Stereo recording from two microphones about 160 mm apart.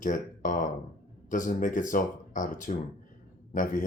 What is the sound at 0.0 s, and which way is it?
Speech, 55° left (ahead or behind).